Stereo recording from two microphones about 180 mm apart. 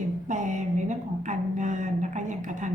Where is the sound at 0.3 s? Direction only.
45° right (ahead or behind).